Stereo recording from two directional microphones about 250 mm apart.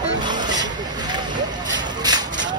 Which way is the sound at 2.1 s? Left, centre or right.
Centre.